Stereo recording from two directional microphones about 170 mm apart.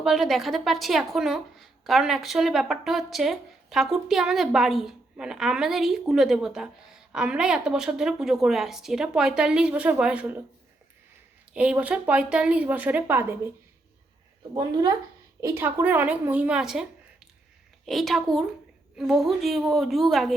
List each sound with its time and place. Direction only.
0.0 s a woman's voice: centre (ahead or behind)
11.5 s speech: 5° right (ahead or behind)
14.5 s speech: 25° right (ahead or behind); by 16.8 s 5° right (ahead or behind)
17.8 s a woman's voice: centre (ahead or behind)